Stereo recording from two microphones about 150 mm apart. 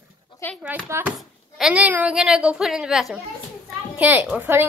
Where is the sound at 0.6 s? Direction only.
10° right (ahead or behind).